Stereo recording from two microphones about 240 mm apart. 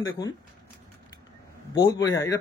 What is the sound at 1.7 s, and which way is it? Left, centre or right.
Speech, centre.